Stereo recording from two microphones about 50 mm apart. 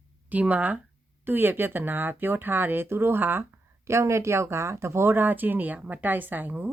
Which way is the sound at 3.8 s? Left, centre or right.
Right.